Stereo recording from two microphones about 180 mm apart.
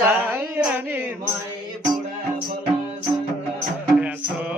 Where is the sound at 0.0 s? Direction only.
10° right (ahead or behind).